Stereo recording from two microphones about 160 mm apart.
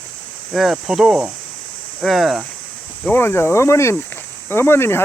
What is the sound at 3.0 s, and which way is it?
Speech, 15° left (ahead or behind).